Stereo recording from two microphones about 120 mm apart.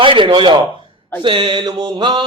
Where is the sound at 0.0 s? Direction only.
45° right (ahead or behind).